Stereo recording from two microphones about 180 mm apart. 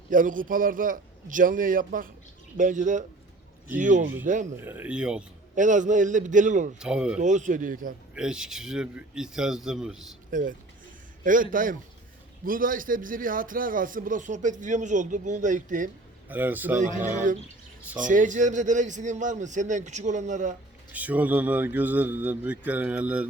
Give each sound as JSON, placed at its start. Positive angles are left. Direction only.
{"t": 0.1, "sound": "a man's voice", "side_deg": -50}
{"t": 4.6, "sound": "speech", "side_deg": -10}
{"t": 5.5, "sound": "a man's voice", "side_deg": -45}
{"t": 6.7, "sound": "speech", "side_deg": -5}
{"t": 7.2, "sound": "a man's voice", "side_deg": -45}
{"t": 8.1, "sound": "speech", "side_deg": -5}
{"t": 10.3, "sound": "a man's voice", "side_deg": -50}
{"t": 16.3, "sound": "speech", "side_deg": -10}
{"t": 16.7, "sound": "a man's voice", "side_deg": -45}
{"t": 20.9, "sound": "speech", "side_deg": -10}